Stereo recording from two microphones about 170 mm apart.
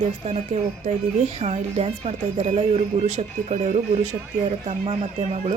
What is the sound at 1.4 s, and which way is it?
Speech, 40° right (ahead or behind).